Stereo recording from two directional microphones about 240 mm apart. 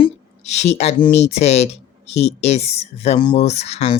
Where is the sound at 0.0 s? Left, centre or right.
Left.